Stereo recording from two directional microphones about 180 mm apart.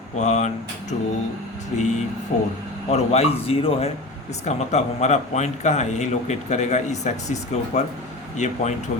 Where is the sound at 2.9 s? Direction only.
35° left (ahead or behind).